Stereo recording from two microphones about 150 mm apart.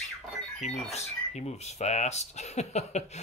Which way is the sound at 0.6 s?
45° left (ahead or behind).